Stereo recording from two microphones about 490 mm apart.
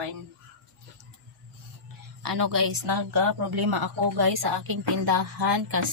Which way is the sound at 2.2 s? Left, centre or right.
Right.